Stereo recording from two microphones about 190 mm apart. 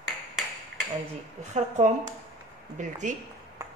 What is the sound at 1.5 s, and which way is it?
A woman's voice, 40° right (ahead or behind).